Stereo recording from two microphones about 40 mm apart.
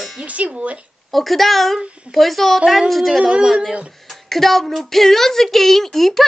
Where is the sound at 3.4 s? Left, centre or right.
Centre.